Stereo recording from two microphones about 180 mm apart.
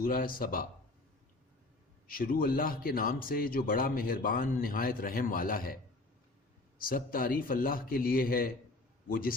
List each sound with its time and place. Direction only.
0.0 s speech: 55° left (ahead or behind)
2.0 s a man's voice: 55° left (ahead or behind)